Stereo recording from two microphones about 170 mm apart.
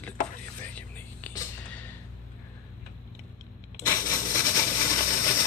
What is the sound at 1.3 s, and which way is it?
Music, 20° left (ahead or behind).